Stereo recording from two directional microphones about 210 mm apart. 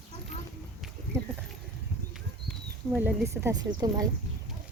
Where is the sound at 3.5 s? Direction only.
20° right (ahead or behind).